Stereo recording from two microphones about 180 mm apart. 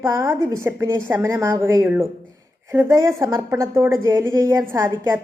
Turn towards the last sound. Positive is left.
turn(degrees=-15)  # may be behind; listen again after turning